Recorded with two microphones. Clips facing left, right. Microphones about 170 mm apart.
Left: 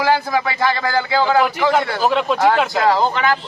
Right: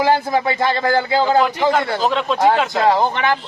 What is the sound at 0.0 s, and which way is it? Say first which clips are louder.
Speech: right 1 dB; 25° right (ahead or behind).